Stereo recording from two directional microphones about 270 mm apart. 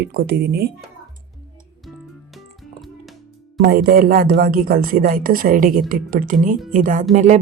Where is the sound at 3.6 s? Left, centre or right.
Right.